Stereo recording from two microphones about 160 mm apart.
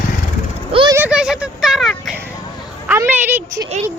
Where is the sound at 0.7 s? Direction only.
35° right (ahead or behind).